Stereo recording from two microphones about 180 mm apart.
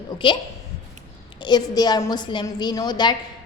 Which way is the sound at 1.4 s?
25° left (ahead or behind).